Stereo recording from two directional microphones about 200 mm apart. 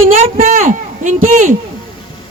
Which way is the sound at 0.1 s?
40° right (ahead or behind).